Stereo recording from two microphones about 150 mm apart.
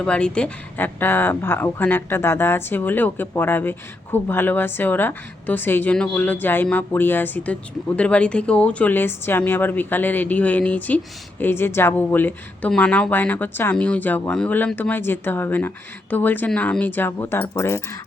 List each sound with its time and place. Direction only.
0.0 s speech: 5° left (ahead or behind)